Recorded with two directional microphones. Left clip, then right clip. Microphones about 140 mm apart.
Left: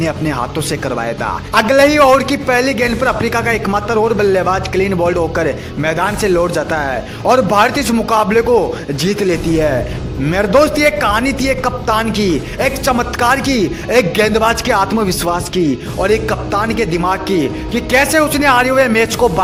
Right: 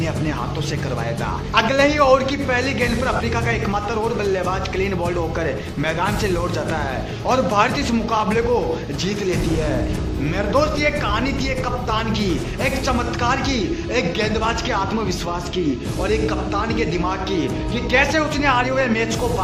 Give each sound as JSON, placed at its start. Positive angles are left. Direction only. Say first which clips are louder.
{"t": 1.5, "sound": "a man's voice", "louder": "left 7 dB", "side_deg": 60}
{"t": 10.3, "sound": "speech", "louder": "left 8 dB", "side_deg": 60}
{"t": 16.0, "sound": "speech", "louder": "left 6 dB", "side_deg": 60}